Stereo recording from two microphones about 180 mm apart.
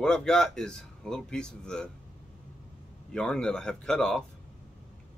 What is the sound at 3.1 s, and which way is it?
Speech, 5° left (ahead or behind).